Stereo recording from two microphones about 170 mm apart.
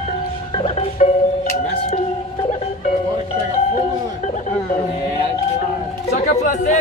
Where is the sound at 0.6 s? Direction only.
40° left (ahead or behind).